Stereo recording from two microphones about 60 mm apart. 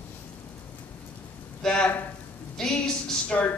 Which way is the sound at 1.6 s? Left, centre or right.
Centre.